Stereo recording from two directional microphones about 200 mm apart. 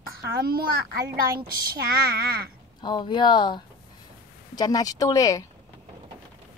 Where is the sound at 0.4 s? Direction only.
50° right (ahead or behind).